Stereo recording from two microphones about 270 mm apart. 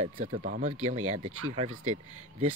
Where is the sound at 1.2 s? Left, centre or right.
Right.